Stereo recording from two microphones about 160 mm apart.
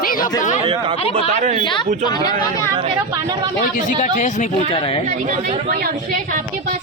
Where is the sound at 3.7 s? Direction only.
50° left (ahead or behind).